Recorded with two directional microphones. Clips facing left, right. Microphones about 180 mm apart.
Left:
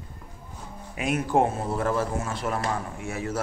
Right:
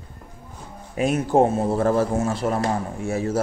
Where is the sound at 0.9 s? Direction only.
30° right (ahead or behind).